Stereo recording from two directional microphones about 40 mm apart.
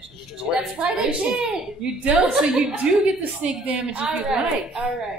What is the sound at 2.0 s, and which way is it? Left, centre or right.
Speech, right.